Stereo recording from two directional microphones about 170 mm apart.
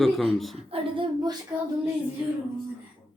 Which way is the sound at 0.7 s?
30° right (ahead or behind).